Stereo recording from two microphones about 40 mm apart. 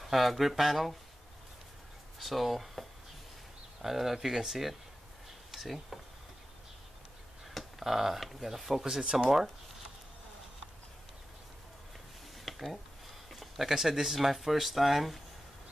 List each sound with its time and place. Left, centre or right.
0.1 s speech: centre
2.1 s speech: centre
7.4 s speech: centre
8.8 s speech: centre
12.4 s a sound: centre
13.3 s speech: centre